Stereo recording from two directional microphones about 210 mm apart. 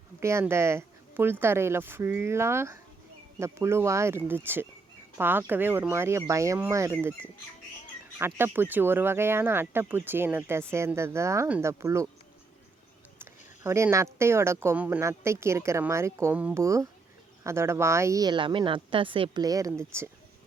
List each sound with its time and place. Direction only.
0.2 s speech: 15° right (ahead or behind)
8.2 s speech: 10° right (ahead or behind)
13.7 s speech: 15° right (ahead or behind)